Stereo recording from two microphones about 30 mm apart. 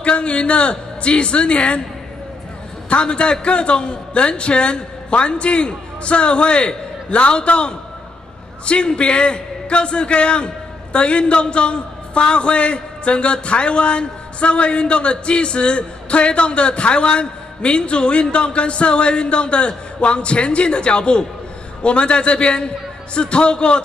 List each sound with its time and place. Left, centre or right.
0.0 s a man's voice: left
2.9 s a man's voice: left